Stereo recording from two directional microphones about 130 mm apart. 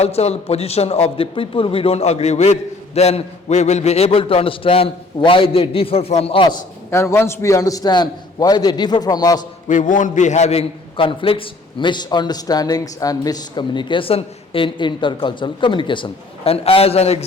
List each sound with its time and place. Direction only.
0.0 s a man's voice: 55° left (ahead or behind)
6.9 s a man's voice: 20° left (ahead or behind)
9.6 s a man's voice: 80° left; by 17.2 s 50° left (ahead or behind)